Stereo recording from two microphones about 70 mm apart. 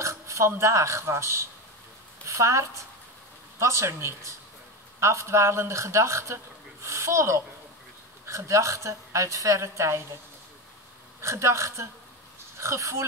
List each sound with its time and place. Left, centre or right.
0.0 s a woman's voice: right
11.1 s speech: right